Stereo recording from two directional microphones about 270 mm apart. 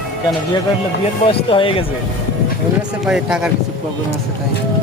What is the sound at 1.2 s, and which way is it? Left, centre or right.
Speech, centre.